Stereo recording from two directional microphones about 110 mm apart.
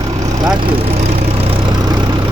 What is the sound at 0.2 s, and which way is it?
Vehicle, 35° right (ahead or behind).